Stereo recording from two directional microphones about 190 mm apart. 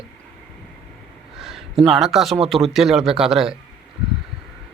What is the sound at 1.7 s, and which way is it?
Speech, centre (ahead or behind).